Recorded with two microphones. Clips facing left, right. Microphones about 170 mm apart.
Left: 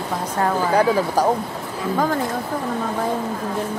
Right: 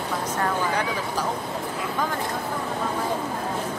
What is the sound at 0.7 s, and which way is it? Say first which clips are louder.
Speech: left 9 dB; 40° left (ahead or behind).